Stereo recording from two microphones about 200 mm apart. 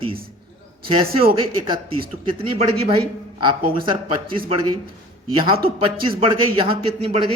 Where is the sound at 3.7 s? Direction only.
25° right (ahead or behind).